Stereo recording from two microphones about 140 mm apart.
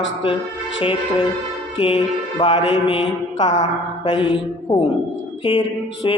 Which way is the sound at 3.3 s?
55° left (ahead or behind).